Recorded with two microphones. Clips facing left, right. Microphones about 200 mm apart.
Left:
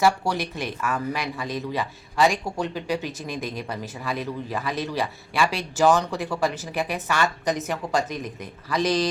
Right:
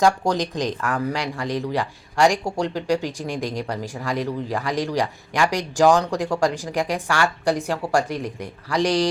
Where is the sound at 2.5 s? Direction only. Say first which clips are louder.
Right 4 dB; 80° right.